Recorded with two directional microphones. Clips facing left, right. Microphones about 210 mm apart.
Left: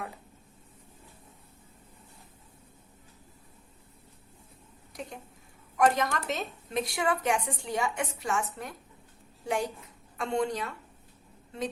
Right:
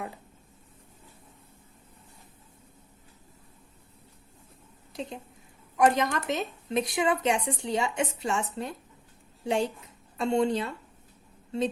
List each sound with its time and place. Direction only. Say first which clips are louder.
4.9 s a woman's voice: right 4 dB; 25° right (ahead or behind)